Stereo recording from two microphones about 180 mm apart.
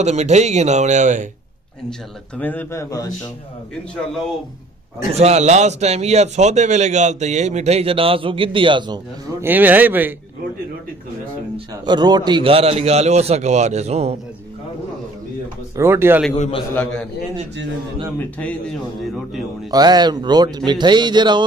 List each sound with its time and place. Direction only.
0.0 s a man's voice: 40° right (ahead or behind)
1.9 s a man's voice: 10° left (ahead or behind)
3.9 s a man's voice: centre (ahead or behind)
5.1 s a man's voice: 35° right (ahead or behind)
9.4 s a man's voice: 10° right (ahead or behind)
11.5 s a man's voice: 25° right (ahead or behind)
15.7 s a man's voice: 15° right (ahead or behind)
16.3 s a man's voice: 35° left (ahead or behind)
18.4 s a man's voice: 5° left (ahead or behind)
19.7 s speech: 20° right (ahead or behind)